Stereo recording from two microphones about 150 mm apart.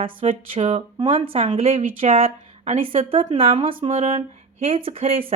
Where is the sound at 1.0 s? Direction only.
35° right (ahead or behind).